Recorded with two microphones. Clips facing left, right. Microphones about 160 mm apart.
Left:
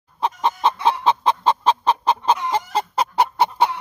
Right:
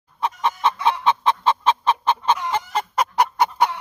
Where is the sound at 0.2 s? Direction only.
30° left (ahead or behind).